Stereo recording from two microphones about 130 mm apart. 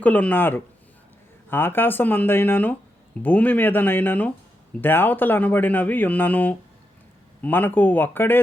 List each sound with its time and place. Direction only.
0.0 s speech: 10° left (ahead or behind)